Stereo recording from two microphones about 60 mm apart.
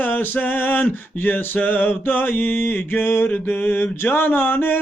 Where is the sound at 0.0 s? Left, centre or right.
Left.